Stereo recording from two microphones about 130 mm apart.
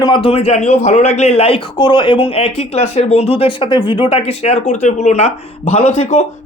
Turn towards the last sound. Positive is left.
turn(degrees=50)  # may be behind; listen again after turning